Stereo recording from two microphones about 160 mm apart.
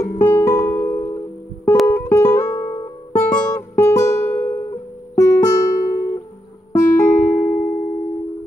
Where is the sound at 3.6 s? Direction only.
20° left (ahead or behind).